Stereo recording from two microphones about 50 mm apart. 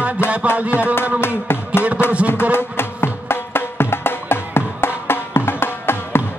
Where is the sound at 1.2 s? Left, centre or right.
Left.